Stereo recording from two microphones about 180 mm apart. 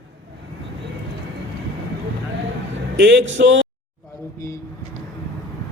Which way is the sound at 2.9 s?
75° right (ahead or behind).